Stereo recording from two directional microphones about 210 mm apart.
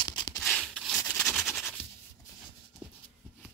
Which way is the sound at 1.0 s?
10° left (ahead or behind).